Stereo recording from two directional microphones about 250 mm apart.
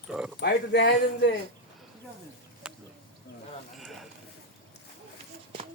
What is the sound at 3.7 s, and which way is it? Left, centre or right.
Speech, centre.